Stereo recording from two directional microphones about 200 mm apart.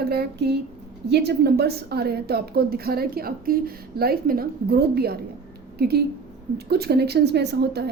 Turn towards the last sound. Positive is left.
turn(degrees=-55)  # may be behind; listen again after turning